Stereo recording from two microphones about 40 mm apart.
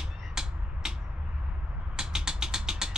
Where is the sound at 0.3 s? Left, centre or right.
Centre.